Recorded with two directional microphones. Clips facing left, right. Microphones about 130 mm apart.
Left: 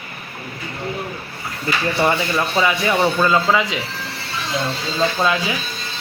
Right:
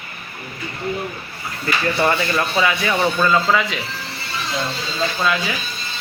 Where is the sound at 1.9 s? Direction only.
10° left (ahead or behind).